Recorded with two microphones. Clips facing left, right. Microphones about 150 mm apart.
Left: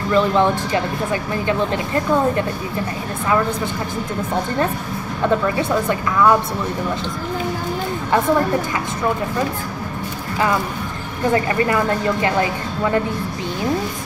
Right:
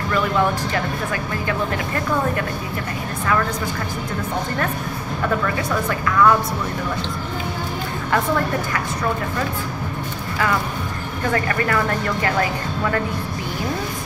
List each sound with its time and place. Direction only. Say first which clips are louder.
0.1 s speech: left 4 dB; 20° left (ahead or behind)
5.6 s speech: left 4 dB; 25° left (ahead or behind)
11.3 s speech: left 3 dB; 20° left (ahead or behind)